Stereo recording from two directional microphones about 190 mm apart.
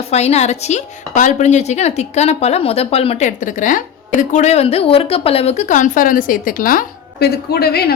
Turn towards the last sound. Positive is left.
turn(degrees=55)  # may be behind; listen again after turning